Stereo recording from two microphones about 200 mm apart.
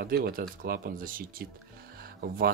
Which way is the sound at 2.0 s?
50° right (ahead or behind).